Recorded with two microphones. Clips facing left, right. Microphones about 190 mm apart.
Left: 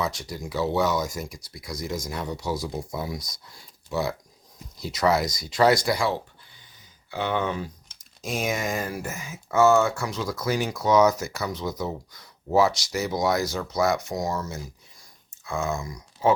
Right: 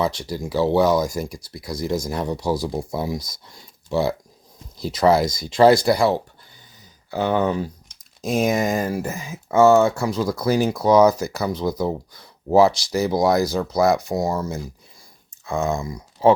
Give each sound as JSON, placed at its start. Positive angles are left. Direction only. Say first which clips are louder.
{"t": 0.0, "sound": "speech", "louder": "right 6 dB", "side_deg": -30}